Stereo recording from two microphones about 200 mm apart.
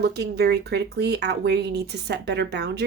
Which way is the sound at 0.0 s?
55° right (ahead or behind).